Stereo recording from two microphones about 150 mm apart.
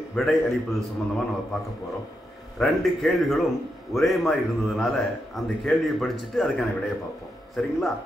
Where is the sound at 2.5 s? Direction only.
Centre (ahead or behind).